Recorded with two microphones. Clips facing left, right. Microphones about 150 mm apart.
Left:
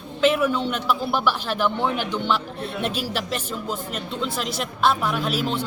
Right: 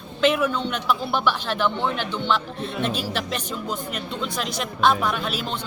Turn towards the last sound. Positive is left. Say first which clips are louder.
# left 4 dB
turn(degrees=5)  # may be behind; listen again after turning